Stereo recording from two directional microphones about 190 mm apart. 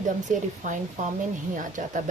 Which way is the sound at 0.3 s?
40° right (ahead or behind).